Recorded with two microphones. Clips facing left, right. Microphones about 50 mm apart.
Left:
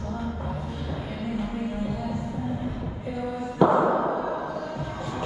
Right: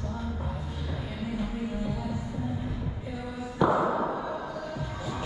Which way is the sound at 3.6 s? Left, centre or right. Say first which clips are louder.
Left 5 dB; centre.